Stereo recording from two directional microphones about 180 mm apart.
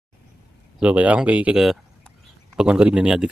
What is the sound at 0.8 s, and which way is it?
Speech, 10° right (ahead or behind).